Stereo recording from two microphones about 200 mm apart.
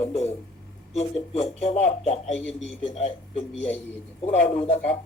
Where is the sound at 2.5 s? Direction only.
Centre (ahead or behind).